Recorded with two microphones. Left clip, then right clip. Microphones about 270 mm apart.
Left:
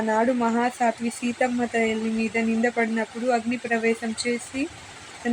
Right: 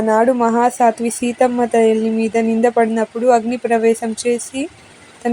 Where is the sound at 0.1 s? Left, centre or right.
Right.